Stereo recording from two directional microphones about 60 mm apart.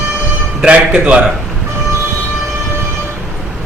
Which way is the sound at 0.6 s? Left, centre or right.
Centre.